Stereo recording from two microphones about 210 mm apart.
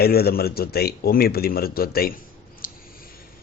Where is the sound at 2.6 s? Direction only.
45° left (ahead or behind).